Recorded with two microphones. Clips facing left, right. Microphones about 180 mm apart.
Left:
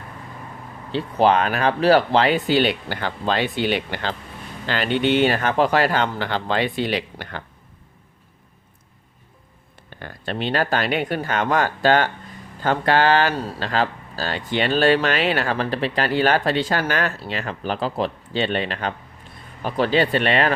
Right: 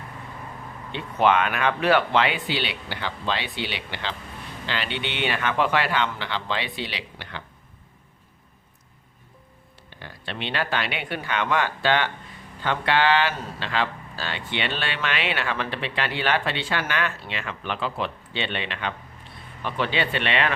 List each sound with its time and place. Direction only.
0.9 s a man's voice: 35° left (ahead or behind)
10.0 s speech: 45° left (ahead or behind)